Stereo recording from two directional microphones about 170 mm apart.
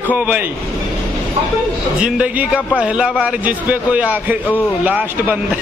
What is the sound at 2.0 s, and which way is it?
A man's voice, 5° right (ahead or behind).